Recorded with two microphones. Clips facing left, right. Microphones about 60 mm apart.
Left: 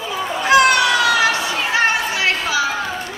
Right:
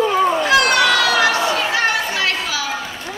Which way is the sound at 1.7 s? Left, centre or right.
Left.